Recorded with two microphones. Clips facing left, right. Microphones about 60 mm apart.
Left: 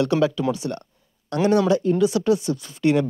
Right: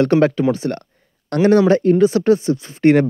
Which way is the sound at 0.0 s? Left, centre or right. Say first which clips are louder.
Right 6 dB; right.